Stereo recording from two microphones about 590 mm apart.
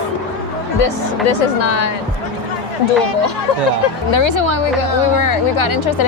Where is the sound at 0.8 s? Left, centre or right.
Left.